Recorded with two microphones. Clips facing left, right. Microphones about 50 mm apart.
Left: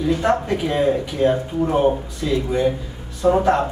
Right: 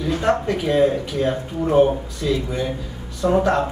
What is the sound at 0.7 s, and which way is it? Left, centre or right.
Speech, centre.